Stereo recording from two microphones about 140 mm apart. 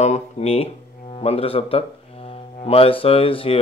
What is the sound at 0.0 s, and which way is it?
Speech, 50° left (ahead or behind).